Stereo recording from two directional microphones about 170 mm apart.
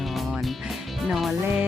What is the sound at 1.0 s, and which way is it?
Speech, centre (ahead or behind).